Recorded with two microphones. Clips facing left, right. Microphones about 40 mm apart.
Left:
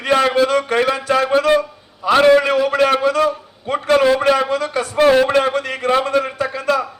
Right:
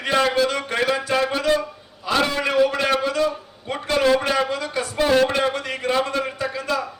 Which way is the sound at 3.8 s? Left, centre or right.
Left.